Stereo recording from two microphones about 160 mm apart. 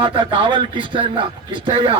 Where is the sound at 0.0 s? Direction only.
30° right (ahead or behind).